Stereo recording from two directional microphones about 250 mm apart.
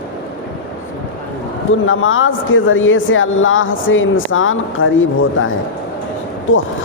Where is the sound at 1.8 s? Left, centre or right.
Left.